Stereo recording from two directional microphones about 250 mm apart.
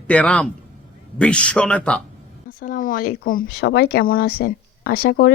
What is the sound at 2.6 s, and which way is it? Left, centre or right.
Speech, left.